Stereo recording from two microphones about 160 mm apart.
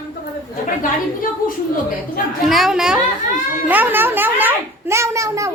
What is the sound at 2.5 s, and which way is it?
A woman's voice, centre (ahead or behind).